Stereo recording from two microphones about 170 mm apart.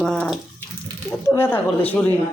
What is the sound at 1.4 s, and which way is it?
Speech, 10° left (ahead or behind).